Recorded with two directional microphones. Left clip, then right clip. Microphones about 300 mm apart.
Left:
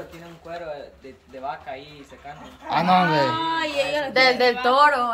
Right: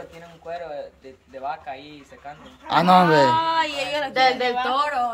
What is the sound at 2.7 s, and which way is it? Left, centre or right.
Speech, centre.